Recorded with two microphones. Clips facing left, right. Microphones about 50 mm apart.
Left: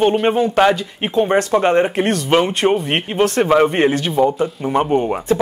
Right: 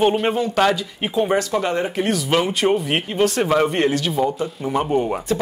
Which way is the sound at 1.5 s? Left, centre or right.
Left.